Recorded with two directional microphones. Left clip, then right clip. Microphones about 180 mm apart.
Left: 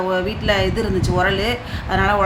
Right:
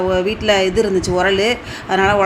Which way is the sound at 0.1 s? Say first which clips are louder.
Right 5 dB; 15° right (ahead or behind).